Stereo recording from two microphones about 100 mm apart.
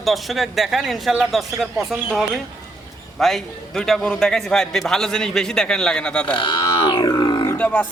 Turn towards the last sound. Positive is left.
turn(degrees=15)  # may be behind; listen again after turning